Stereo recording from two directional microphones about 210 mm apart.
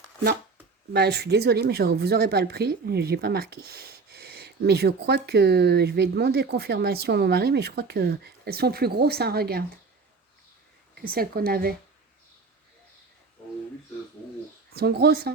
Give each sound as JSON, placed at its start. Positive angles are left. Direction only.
{"t": 0.9, "sound": "a woman's voice", "side_deg": -50}
{"t": 10.9, "sound": "a woman's voice", "side_deg": -45}
{"t": 14.7, "sound": "a woman's voice", "side_deg": -50}